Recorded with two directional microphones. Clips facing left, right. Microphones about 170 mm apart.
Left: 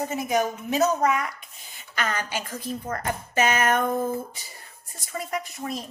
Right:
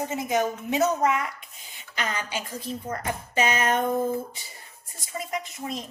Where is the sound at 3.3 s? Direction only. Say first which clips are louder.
Left 2 dB; 45° left (ahead or behind).